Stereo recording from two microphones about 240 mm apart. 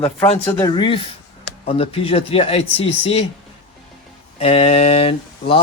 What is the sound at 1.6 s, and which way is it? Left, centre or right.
Speech, left.